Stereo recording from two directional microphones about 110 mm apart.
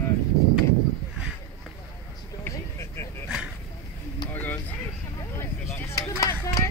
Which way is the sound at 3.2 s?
5° right (ahead or behind).